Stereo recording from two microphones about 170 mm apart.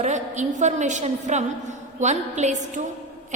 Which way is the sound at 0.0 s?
45° right (ahead or behind).